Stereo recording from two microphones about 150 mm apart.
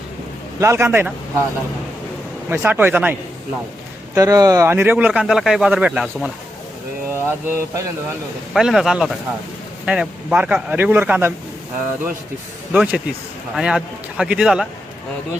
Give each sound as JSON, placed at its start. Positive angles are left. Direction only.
{"t": 0.6, "sound": "speech", "side_deg": -15}
{"t": 2.5, "sound": "speech", "side_deg": -15}
{"t": 4.1, "sound": "speech", "side_deg": -20}
{"t": 8.5, "sound": "speech", "side_deg": 0}
{"t": 12.7, "sound": "speech", "side_deg": -5}